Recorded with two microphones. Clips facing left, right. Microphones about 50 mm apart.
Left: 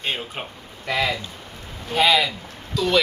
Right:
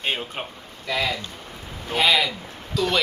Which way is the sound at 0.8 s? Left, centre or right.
Left.